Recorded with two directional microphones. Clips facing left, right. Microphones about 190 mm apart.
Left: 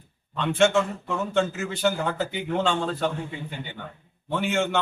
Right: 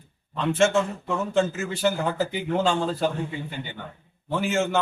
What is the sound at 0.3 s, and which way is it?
Speech, centre (ahead or behind).